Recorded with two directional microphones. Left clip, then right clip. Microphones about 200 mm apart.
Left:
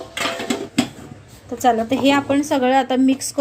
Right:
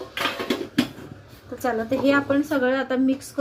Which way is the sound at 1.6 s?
45° left (ahead or behind).